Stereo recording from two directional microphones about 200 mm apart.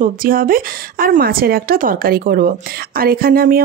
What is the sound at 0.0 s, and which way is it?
A woman's voice, 45° right (ahead or behind).